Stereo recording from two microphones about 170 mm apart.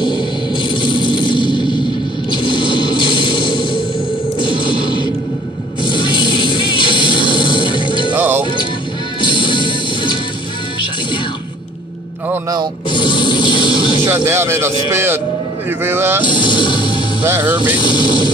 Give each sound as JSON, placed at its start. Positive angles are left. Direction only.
{"t": 0.7, "sound": "music", "side_deg": 30}
{"t": 8.1, "sound": "music", "side_deg": -10}
{"t": 9.2, "sound": "music", "side_deg": 30}
{"t": 12.3, "sound": "music", "side_deg": -20}
{"t": 12.9, "sound": "music", "side_deg": 30}
{"t": 14.0, "sound": "music", "side_deg": -15}
{"t": 15.8, "sound": "speech", "side_deg": -15}
{"t": 16.3, "sound": "music", "side_deg": 30}
{"t": 17.2, "sound": "speech", "side_deg": -10}
{"t": 17.8, "sound": "speech", "side_deg": 25}